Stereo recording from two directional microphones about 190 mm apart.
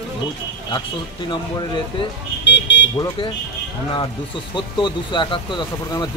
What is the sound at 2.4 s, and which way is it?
Speech, 70° left (ahead or behind).